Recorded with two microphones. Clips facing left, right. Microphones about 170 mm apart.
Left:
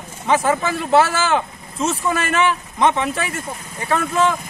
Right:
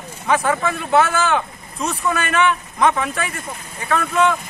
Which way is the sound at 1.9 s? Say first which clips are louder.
Right 1 dB; 30° left (ahead or behind).